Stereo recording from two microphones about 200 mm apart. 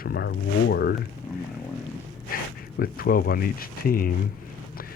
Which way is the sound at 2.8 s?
45° left (ahead or behind).